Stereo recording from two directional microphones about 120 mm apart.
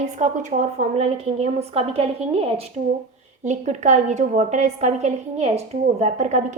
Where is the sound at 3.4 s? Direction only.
75° right (ahead or behind).